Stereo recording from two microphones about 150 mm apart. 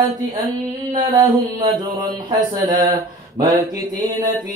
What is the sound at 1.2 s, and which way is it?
Mantra, 25° right (ahead or behind).